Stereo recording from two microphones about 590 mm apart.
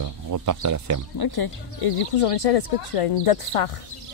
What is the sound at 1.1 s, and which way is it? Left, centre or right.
Speech, left.